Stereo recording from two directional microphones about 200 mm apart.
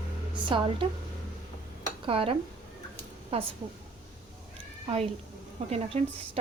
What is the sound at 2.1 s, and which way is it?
Speech, 25° right (ahead or behind).